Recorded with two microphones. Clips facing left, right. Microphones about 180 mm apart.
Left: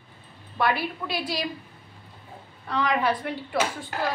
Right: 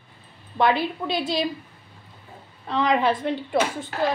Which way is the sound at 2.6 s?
20° right (ahead or behind).